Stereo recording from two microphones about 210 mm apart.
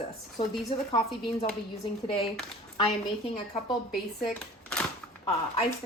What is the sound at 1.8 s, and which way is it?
Speech, 20° left (ahead or behind).